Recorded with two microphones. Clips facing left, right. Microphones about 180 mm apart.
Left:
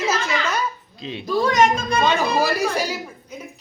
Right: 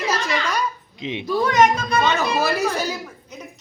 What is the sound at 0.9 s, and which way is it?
Speech, 20° right (ahead or behind).